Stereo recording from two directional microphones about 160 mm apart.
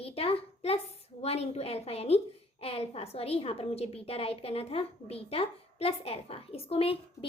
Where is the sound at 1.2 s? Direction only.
40° left (ahead or behind).